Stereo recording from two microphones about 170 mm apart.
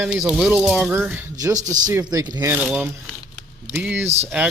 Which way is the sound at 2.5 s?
10° right (ahead or behind).